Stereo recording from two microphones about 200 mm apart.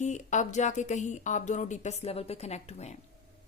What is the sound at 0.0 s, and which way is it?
A woman's voice, 35° left (ahead or behind).